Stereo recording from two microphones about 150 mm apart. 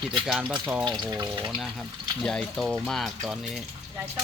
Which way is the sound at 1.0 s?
25° right (ahead or behind).